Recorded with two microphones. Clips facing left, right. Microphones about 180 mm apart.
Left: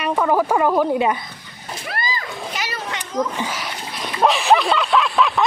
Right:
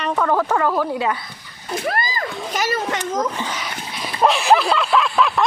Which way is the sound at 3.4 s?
5° left (ahead or behind).